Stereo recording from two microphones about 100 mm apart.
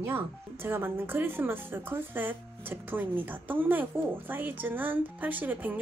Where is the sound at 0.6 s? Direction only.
20° right (ahead or behind).